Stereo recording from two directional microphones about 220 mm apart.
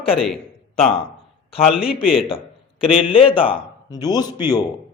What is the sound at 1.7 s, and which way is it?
Speech, centre (ahead or behind).